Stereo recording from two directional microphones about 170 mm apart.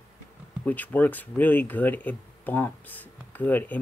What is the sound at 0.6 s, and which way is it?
Speech, 10° left (ahead or behind).